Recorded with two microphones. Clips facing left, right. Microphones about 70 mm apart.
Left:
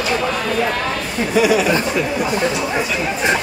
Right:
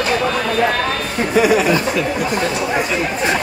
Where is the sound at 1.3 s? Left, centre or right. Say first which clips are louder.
Right 1 dB; right.